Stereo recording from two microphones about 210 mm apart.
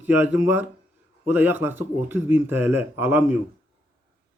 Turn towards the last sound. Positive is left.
turn(degrees=-10)  # may be behind; listen again after turning